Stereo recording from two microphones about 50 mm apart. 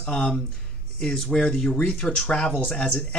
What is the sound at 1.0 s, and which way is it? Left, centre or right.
Speech, centre.